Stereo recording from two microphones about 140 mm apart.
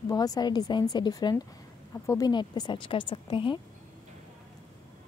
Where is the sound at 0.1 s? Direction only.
25° left (ahead or behind).